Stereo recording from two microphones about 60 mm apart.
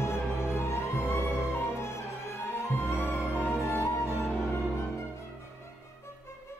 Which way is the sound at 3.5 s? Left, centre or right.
Left.